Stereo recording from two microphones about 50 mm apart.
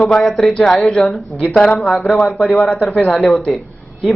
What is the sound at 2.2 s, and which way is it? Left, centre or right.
Speech, centre.